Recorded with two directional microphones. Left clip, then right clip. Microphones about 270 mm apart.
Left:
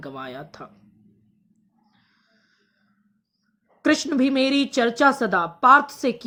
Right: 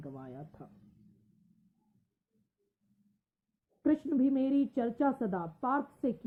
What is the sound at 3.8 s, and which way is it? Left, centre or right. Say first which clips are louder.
A woman's voice: left 10 dB; left.